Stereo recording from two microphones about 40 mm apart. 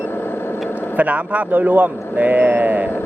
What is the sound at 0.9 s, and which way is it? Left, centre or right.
Speech, right.